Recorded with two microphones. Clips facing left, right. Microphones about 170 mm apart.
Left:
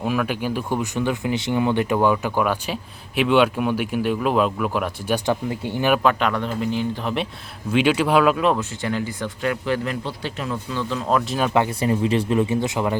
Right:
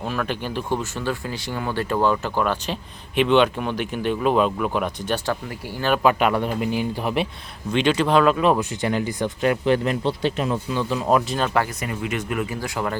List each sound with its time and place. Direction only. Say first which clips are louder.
0.0 s speech: left 3 dB; 10° left (ahead or behind)
5.1 s speech: left 7 dB; 20° left (ahead or behind)
6.0 s speech: right 2 dB; 10° right (ahead or behind)
7.7 s speech: left 1 dB; 5° left (ahead or behind)
8.5 s speech: right 2 dB; 15° right (ahead or behind)
11.3 s speech: left 1 dB; 10° left (ahead or behind)
11.5 s speech: left 4 dB; 25° left (ahead or behind)